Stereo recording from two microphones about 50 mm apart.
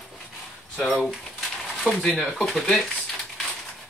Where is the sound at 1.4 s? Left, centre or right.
Centre.